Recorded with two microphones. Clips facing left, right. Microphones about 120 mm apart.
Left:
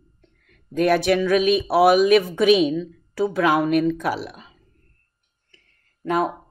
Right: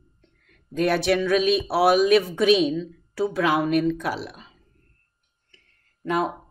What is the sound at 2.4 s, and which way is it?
Speech, 10° left (ahead or behind).